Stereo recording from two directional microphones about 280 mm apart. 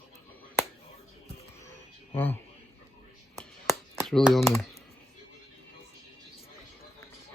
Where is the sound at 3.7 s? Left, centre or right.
Centre.